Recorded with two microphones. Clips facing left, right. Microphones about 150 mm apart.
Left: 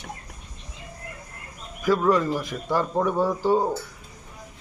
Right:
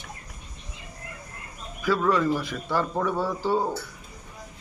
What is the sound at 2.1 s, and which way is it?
A man's voice, 15° left (ahead or behind).